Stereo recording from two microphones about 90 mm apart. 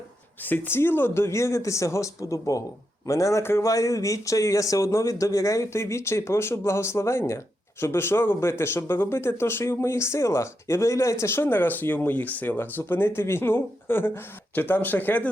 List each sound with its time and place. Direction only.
0.4 s speech: 20° left (ahead or behind)